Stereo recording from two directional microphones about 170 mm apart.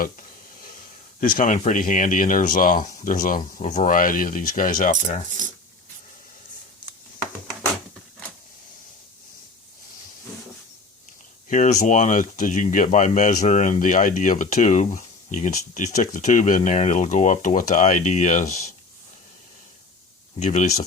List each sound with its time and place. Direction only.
1.2 s speech: 55° left (ahead or behind)
11.4 s speech: 45° left (ahead or behind)
20.4 s speech: 45° left (ahead or behind)